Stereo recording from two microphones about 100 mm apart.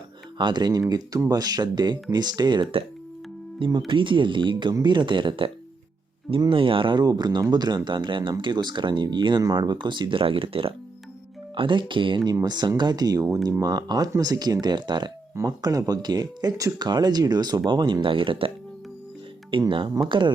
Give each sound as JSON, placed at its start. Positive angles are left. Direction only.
{"t": 0.3, "sound": "speech", "side_deg": -50}
{"t": 3.7, "sound": "speech", "side_deg": -50}
{"t": 6.5, "sound": "speech", "side_deg": -60}
{"t": 11.5, "sound": "speech", "side_deg": -55}